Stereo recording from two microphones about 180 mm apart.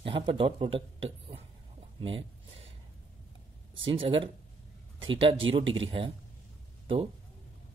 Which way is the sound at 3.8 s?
30° right (ahead or behind).